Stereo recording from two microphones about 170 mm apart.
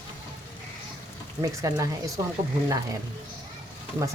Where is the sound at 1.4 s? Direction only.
20° right (ahead or behind).